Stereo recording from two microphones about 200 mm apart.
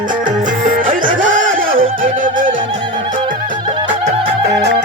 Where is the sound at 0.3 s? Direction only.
45° right (ahead or behind).